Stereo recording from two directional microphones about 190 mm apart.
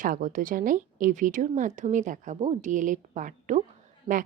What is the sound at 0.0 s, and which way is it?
A woman's voice, 45° right (ahead or behind).